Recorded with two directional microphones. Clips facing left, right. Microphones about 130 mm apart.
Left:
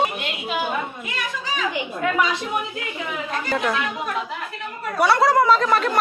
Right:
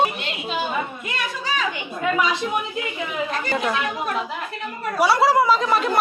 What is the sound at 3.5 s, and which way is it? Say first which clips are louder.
Speech: left 1 dB; 5° right (ahead or behind).